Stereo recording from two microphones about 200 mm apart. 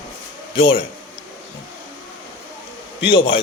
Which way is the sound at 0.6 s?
25° left (ahead or behind).